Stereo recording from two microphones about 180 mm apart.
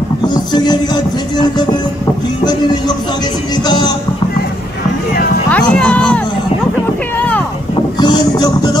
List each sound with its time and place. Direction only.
0.2 s music: 25° left (ahead or behind)
3.6 s music: 25° left (ahead or behind)
5.5 s speech: 5° left (ahead or behind)
8.0 s music: 25° left (ahead or behind)